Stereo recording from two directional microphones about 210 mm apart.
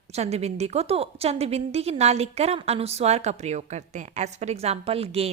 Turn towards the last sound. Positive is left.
turn(degrees=-30)  # may be behind; listen again after turning